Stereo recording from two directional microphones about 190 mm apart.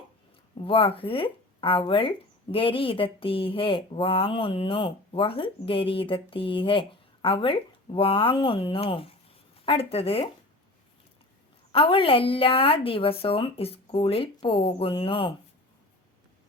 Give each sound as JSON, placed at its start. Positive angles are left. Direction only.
{"t": 0.5, "sound": "speech", "side_deg": 30}
{"t": 11.7, "sound": "speech", "side_deg": 30}